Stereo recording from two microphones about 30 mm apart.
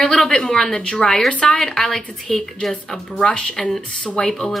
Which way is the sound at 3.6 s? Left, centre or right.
Centre.